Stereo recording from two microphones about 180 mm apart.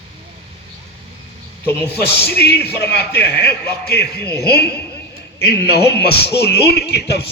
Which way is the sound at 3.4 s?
60° left (ahead or behind).